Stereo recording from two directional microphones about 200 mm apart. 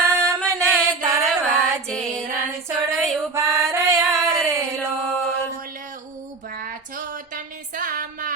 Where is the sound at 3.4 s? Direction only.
15° right (ahead or behind).